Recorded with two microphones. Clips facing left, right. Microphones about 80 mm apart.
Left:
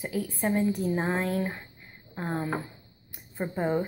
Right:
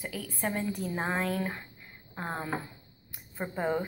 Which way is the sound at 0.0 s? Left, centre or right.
Left.